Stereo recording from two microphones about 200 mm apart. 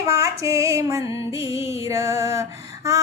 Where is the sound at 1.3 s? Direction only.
15° right (ahead or behind).